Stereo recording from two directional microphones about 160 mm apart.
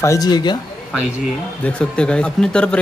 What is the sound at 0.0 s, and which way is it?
Speech, 20° left (ahead or behind).